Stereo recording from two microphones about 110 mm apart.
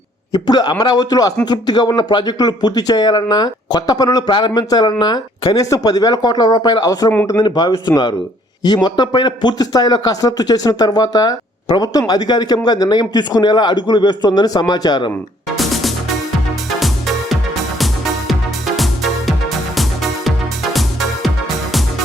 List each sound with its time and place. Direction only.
0.3 s speech: 35° left (ahead or behind)
15.5 s music: centre (ahead or behind)
17.7 s music: centre (ahead or behind)